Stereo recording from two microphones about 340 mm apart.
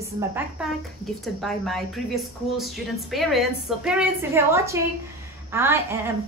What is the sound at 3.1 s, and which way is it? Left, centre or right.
A woman's voice, centre.